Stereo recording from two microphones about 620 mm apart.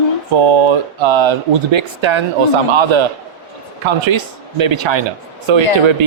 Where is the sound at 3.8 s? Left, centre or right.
Right.